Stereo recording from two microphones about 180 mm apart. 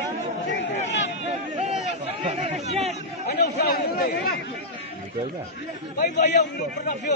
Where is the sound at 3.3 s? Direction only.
65° left (ahead or behind).